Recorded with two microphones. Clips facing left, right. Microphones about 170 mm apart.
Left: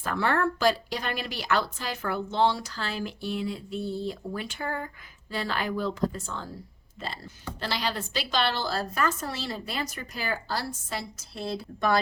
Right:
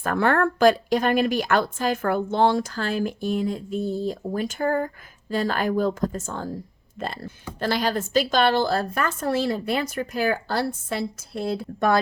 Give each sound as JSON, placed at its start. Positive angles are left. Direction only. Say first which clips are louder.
{"t": 0.0, "sound": "speech", "louder": "right 5 dB", "side_deg": -50}